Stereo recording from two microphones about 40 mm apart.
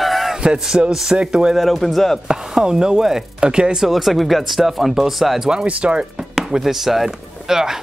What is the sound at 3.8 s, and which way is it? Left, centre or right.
Speech, centre.